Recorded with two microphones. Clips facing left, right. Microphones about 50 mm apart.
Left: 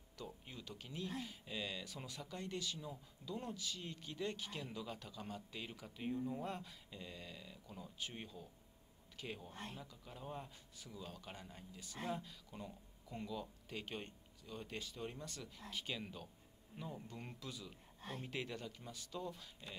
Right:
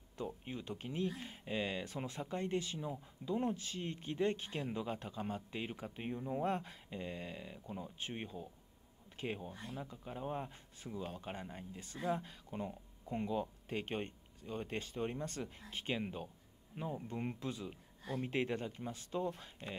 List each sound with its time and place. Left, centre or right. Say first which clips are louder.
0.2 s speech: right 8 dB; right